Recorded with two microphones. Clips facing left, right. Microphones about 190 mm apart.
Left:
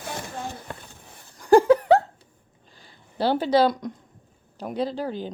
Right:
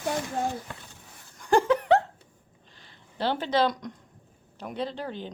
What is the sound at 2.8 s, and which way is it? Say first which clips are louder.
A woman's voice: left 5 dB; 35° left (ahead or behind).